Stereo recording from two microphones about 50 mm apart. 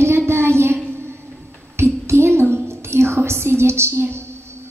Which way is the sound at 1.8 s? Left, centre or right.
Right.